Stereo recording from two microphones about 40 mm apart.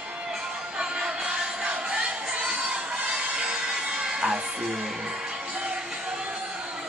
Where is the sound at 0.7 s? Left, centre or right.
Right.